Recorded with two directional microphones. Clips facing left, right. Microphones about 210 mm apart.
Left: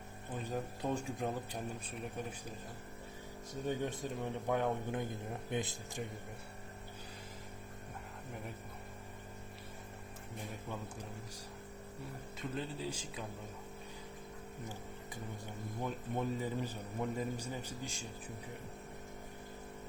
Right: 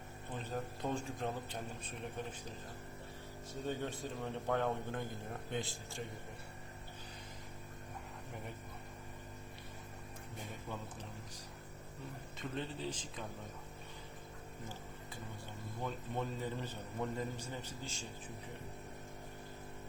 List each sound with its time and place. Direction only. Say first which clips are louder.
0.4 s a man's voice: left 2 dB; 10° left (ahead or behind)
3.7 s a man's voice: left 3 dB; 15° left (ahead or behind)
12.4 s a man's voice: left 1 dB; 5° left (ahead or behind)
15.8 s a man's voice: left 2 dB; 10° left (ahead or behind)